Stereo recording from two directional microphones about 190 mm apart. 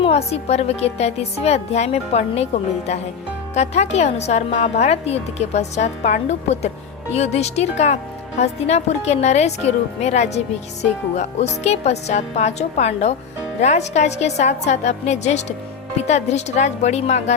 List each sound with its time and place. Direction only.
0.0 s a woman's voice: 35° left (ahead or behind)